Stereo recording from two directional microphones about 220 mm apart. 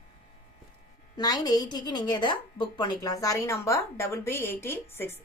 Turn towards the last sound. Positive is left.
turn(degrees=10)  # may be behind; listen again after turning